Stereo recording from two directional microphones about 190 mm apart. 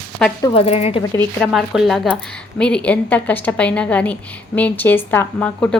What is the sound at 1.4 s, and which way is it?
A woman's voice, centre (ahead or behind).